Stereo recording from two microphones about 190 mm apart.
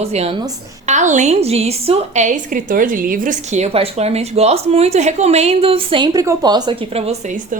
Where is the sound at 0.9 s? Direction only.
40° right (ahead or behind).